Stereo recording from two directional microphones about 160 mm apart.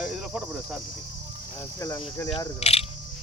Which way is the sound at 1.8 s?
20° left (ahead or behind).